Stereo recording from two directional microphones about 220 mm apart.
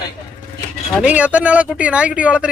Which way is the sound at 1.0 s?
5° right (ahead or behind).